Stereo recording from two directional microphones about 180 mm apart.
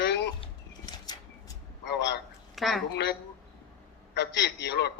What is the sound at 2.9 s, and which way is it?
A man's voice, 70° left (ahead or behind).